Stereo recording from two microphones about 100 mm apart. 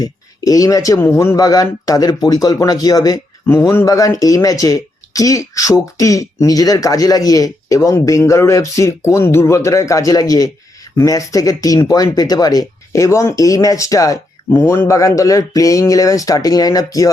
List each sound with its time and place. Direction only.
0.0 s speech: 35° left (ahead or behind)
3.4 s speech: 25° left (ahead or behind)
14.5 s speech: 20° left (ahead or behind); by 17.1 s 35° left (ahead or behind)